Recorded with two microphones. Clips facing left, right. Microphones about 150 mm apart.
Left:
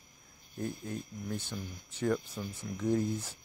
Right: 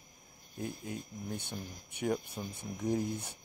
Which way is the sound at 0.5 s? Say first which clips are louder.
Left 2 dB; 10° right (ahead or behind).